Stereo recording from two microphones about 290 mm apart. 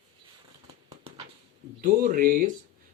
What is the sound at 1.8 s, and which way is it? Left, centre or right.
Speech, right.